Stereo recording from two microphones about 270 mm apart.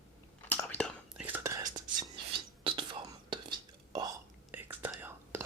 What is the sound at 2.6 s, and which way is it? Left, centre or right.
Whispering, centre.